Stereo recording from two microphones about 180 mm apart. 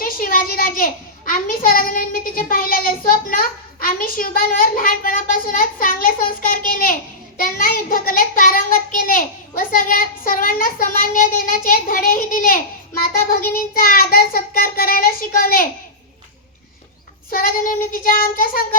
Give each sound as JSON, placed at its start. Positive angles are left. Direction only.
{"t": 0.0, "sound": "a sound", "side_deg": 55}
{"t": 7.3, "sound": "child singing", "side_deg": 55}
{"t": 17.3, "sound": "child singing", "side_deg": 55}